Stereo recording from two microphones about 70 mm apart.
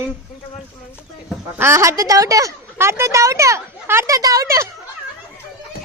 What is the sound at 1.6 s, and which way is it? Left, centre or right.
Speech, right.